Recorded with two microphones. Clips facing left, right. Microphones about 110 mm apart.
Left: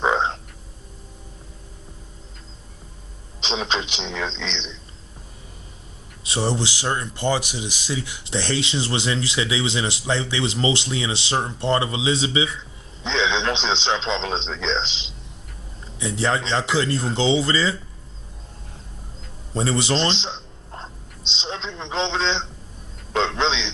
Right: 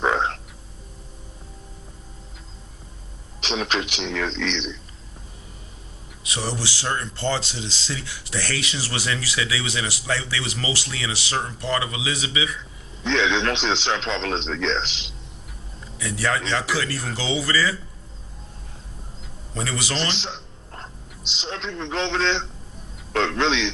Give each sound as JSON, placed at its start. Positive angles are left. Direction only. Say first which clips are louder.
{"t": 0.0, "sound": "frog", "louder": "left 1 dB", "side_deg": 20}
{"t": 3.4, "sound": "speech", "louder": "even", "side_deg": 20}
{"t": 6.2, "sound": "speech", "louder": "left 5 dB", "side_deg": 30}
{"t": 19.5, "sound": "a sound", "louder": "left 6 dB", "side_deg": 30}
{"t": 21.3, "sound": "speech", "louder": "even", "side_deg": 20}